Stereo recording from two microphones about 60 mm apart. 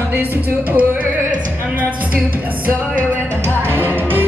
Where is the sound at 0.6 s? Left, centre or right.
Right.